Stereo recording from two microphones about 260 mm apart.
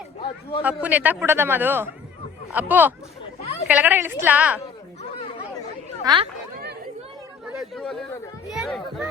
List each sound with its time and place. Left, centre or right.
0.6 s a man's voice: centre
6.0 s speech: centre
7.6 s a child's voice: centre